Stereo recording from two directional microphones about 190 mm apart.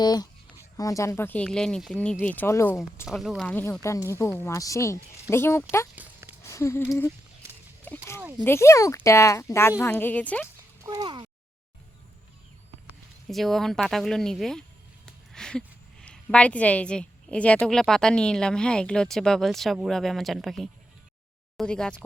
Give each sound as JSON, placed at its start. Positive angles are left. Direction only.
{"t": 0.0, "sound": "speech", "side_deg": 20}
{"t": 3.1, "sound": "speech", "side_deg": 0}
{"t": 6.0, "sound": "a sound", "side_deg": -10}
{"t": 6.4, "sound": "a sound", "side_deg": 15}
{"t": 7.9, "sound": "speech", "side_deg": 15}
{"t": 10.8, "sound": "speech", "side_deg": -25}
{"t": 13.2, "sound": "a woman's voice", "side_deg": 0}